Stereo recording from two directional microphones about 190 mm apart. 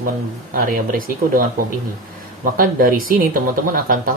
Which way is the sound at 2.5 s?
50° right (ahead or behind).